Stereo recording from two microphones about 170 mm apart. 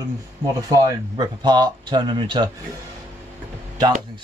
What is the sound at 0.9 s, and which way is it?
Speech, 25° right (ahead or behind).